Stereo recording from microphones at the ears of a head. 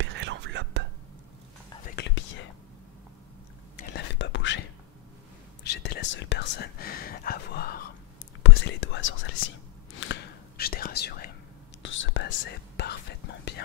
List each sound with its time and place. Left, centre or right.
0.0 s whispering: right
1.8 s whispering: left
3.7 s whispering: left